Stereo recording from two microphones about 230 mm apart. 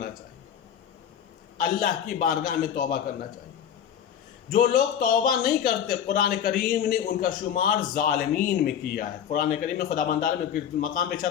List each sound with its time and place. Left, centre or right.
1.5 s a man's voice: left
4.4 s a man's voice: left